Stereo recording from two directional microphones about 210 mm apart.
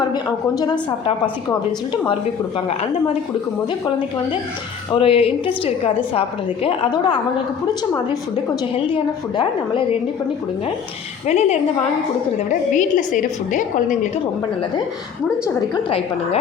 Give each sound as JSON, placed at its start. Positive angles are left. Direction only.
{"t": 0.1, "sound": "a woman's voice", "side_deg": 20}
{"t": 4.9, "sound": "a woman's voice", "side_deg": 25}
{"t": 8.9, "sound": "a woman's voice", "side_deg": 25}
{"t": 11.3, "sound": "a woman's voice", "side_deg": 30}
{"t": 15.7, "sound": "a woman's voice", "side_deg": 25}